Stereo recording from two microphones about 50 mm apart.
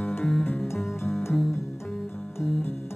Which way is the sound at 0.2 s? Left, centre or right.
Centre.